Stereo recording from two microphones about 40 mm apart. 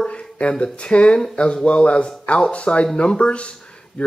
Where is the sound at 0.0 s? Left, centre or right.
Left.